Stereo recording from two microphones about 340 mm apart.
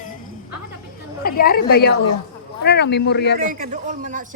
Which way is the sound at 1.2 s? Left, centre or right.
Left.